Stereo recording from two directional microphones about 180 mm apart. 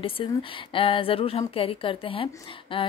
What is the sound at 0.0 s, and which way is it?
Speech, 30° left (ahead or behind).